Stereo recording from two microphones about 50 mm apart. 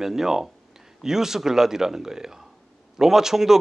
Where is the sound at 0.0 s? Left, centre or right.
Centre.